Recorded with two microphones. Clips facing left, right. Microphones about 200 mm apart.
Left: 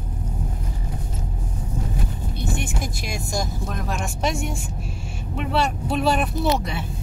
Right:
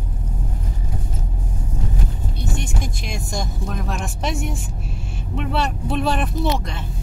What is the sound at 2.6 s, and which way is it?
A woman's voice, 5° left (ahead or behind).